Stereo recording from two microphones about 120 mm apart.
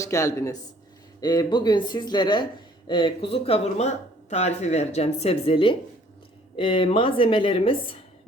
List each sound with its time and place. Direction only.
0.0 s speech: 25° left (ahead or behind); by 7.8 s 50° left (ahead or behind)